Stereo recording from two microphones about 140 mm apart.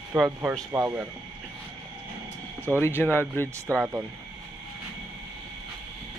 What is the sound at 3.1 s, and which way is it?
Speech, 15° left (ahead or behind).